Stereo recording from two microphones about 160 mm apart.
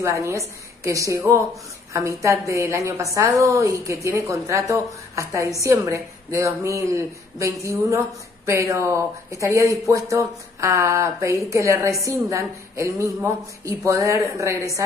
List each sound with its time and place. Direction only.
0.0 s a woman's voice: 20° right (ahead or behind)